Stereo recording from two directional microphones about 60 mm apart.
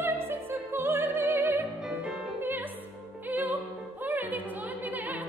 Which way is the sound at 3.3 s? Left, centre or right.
Right.